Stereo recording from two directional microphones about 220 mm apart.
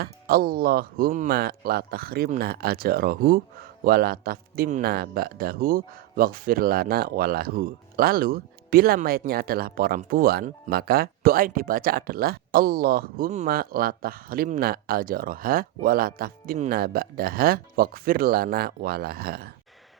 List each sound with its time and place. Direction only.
0.0 s speech: 45° right (ahead or behind)